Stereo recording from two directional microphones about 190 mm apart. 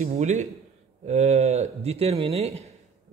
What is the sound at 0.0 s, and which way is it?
Speech, 35° right (ahead or behind).